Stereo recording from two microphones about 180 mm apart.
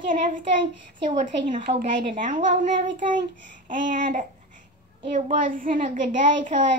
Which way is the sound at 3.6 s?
45° right (ahead or behind).